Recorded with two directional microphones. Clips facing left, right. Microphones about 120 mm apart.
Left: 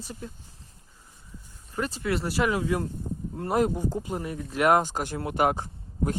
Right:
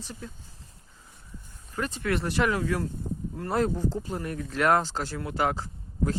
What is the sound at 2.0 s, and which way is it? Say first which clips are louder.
Speech: right 1 dB; 10° left (ahead or behind).